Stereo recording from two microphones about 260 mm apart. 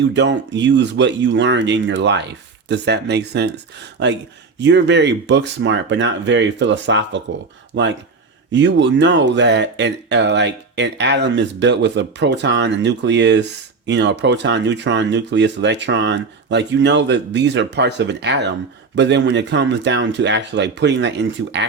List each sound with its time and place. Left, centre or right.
0.1 s speech: right